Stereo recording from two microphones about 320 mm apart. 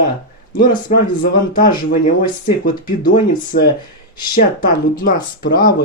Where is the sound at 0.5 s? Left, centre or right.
Left.